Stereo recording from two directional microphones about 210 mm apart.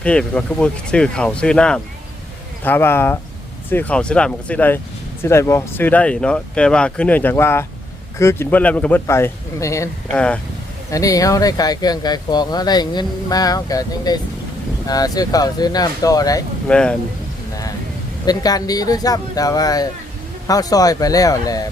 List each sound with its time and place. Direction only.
0.0 s speech: 5° left (ahead or behind)
10.9 s speech: 15° left (ahead or behind)
16.6 s speech: 5° left (ahead or behind)
18.3 s speech: 20° left (ahead or behind)